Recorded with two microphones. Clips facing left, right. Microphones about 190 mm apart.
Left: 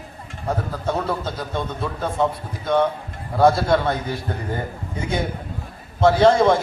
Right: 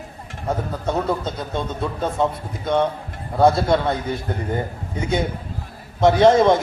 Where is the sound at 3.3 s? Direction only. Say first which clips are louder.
Even; 25° right (ahead or behind).